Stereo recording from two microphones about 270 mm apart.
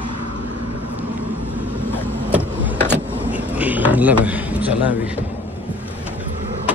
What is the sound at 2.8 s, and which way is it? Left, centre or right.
Vehicle, centre.